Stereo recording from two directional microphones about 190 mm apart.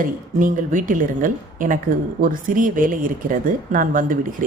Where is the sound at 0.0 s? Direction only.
45° right (ahead or behind).